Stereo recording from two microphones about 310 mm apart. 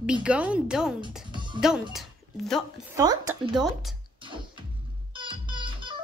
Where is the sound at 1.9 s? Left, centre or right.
Centre.